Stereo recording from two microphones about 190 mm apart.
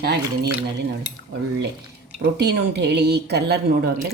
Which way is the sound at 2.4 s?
60° right (ahead or behind).